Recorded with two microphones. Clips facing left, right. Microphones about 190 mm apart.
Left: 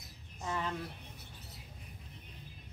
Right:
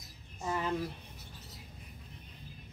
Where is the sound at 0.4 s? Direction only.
10° right (ahead or behind).